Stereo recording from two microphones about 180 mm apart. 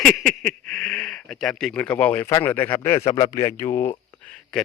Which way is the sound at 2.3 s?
15° left (ahead or behind).